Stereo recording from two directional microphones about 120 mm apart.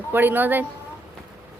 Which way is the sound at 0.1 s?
15° right (ahead or behind).